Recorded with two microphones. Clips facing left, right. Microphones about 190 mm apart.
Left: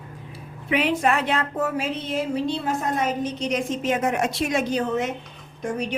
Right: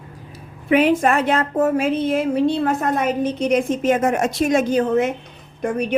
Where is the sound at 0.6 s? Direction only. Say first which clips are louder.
Right 6 dB; 50° right (ahead or behind).